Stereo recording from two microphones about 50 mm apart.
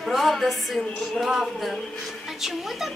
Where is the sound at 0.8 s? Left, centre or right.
Centre.